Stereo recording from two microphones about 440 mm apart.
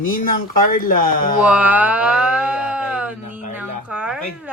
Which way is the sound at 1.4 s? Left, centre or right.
Centre.